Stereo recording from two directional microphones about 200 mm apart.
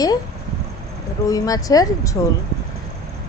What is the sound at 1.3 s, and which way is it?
A woman's voice, 20° left (ahead or behind).